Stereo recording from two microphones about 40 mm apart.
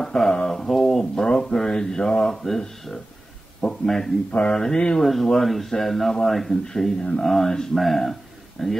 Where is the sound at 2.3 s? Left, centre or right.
Centre.